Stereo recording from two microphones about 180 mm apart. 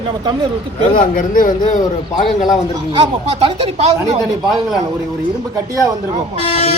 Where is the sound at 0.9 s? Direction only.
50° left (ahead or behind).